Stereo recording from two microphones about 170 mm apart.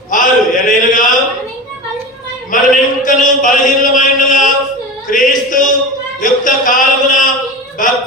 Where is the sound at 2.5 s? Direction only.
50° left (ahead or behind).